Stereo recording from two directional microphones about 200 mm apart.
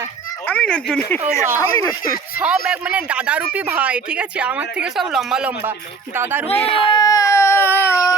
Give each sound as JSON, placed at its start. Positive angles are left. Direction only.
{"t": 0.4, "sound": "speech", "side_deg": 5}
{"t": 2.3, "sound": "speech", "side_deg": -5}
{"t": 6.7, "sound": "baby cry", "side_deg": 25}